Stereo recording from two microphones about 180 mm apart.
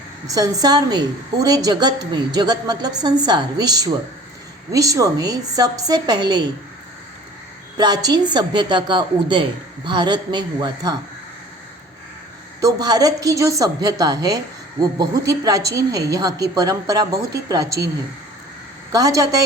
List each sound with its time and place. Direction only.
0.3 s a woman's voice: 20° right (ahead or behind)
7.8 s a woman's voice: 20° right (ahead or behind)
12.5 s a woman's voice: 20° right (ahead or behind)
18.9 s a woman's voice: 20° right (ahead or behind)